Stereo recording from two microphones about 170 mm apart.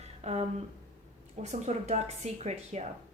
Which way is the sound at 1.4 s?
40° right (ahead or behind).